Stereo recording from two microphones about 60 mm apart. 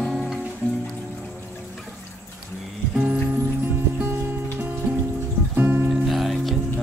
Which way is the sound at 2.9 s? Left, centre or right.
Centre.